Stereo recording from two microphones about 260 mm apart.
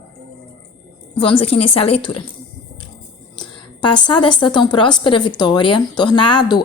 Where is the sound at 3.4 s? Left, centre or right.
Centre.